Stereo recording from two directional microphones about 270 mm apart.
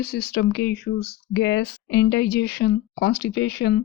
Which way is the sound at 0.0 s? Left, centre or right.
Left.